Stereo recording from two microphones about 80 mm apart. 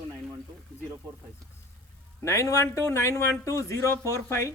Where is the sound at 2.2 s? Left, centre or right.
Left.